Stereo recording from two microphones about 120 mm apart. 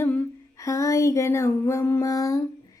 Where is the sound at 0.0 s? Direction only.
15° left (ahead or behind).